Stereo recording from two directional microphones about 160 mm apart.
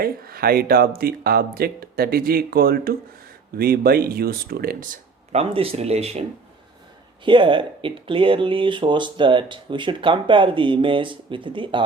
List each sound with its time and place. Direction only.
0.0 s speech: 70° right (ahead or behind)
5.3 s speech: 35° right (ahead or behind)
7.3 s speech: 30° right (ahead or behind)